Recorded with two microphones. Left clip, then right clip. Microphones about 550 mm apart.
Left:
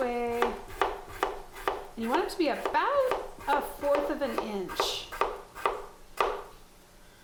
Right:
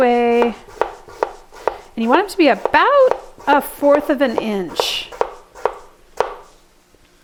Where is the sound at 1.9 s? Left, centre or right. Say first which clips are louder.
Right 15 dB; right.